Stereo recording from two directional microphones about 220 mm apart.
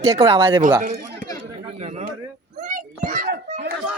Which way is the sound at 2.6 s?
35° right (ahead or behind).